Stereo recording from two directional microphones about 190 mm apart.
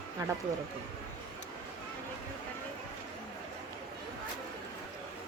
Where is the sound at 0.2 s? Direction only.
15° right (ahead or behind).